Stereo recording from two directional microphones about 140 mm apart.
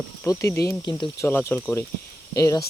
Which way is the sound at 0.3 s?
20° left (ahead or behind).